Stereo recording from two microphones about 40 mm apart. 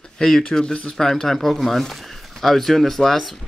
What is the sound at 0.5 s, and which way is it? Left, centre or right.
Speech, centre.